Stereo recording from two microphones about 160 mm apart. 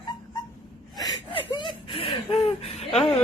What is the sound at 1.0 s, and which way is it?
Chuckle, 25° left (ahead or behind).